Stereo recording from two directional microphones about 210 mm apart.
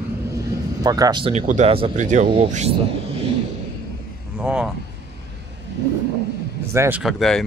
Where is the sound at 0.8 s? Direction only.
15° right (ahead or behind); by 2.7 s 35° right (ahead or behind).